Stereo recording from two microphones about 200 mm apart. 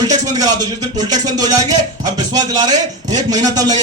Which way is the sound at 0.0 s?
20° right (ahead or behind).